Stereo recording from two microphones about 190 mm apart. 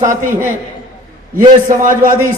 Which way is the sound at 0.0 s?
45° right (ahead or behind).